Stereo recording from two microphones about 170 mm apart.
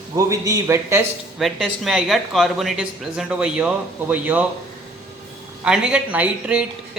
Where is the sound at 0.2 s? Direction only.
20° right (ahead or behind).